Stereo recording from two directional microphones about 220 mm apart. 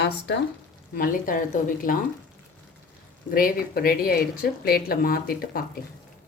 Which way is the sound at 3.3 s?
40° left (ahead or behind).